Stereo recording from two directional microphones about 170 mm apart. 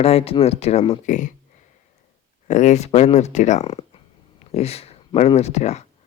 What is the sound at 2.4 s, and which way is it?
Speech, 45° left (ahead or behind).